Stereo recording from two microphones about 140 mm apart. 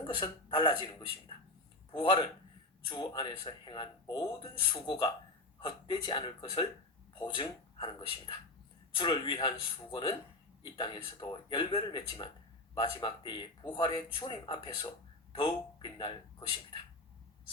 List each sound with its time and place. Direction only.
0.1 s a man's voice: 35° left (ahead or behind)